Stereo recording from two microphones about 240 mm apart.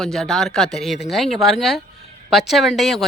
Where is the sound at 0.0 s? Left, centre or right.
Centre.